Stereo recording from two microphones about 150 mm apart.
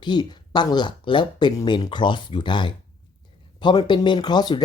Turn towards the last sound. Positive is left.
turn(degrees=30)  # may be behind; listen again after turning